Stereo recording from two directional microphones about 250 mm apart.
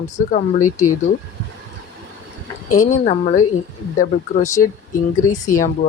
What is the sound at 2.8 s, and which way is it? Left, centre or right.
Speech, left.